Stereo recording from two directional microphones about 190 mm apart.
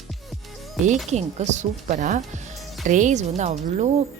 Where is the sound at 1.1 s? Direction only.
35° right (ahead or behind).